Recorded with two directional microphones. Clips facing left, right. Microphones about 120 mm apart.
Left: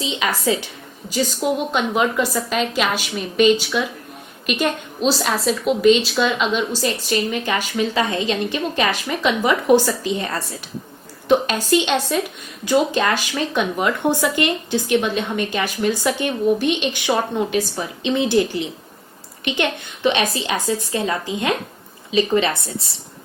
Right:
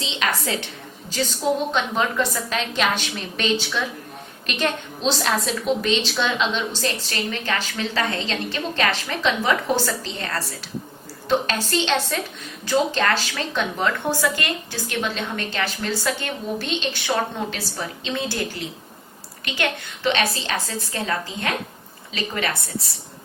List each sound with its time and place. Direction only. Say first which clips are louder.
1.7 s a woman's voice: left 3 dB; 10° left (ahead or behind)